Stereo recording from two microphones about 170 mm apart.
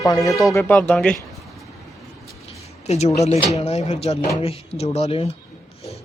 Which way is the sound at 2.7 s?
40° left (ahead or behind).